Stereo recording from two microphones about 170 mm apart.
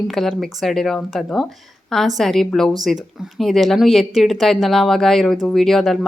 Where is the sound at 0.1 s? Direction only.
Centre (ahead or behind).